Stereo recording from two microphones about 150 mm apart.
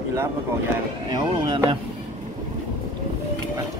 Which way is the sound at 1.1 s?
25° right (ahead or behind).